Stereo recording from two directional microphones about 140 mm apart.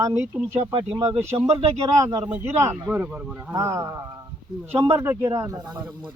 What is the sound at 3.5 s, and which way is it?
Speech, 20° right (ahead or behind).